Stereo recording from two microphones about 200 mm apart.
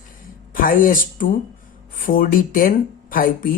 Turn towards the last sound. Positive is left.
turn(degrees=45)  # may be behind; listen again after turning